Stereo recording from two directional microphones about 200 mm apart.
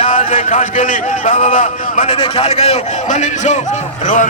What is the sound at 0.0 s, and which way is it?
A man's voice, 40° left (ahead or behind).